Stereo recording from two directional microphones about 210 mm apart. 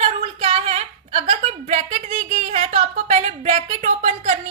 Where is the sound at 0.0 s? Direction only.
30° right (ahead or behind).